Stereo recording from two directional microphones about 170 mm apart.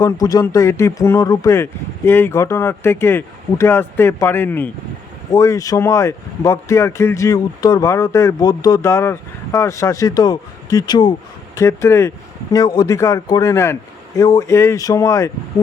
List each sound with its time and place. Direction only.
0.0 s speech: 20° left (ahead or behind)